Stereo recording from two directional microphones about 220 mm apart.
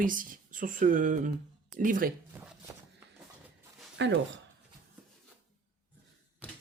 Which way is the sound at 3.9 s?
55° right (ahead or behind).